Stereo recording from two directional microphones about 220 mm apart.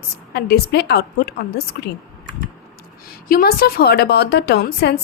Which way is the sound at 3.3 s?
45° left (ahead or behind).